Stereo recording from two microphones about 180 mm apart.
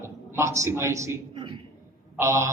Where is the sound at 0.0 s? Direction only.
15° right (ahead or behind).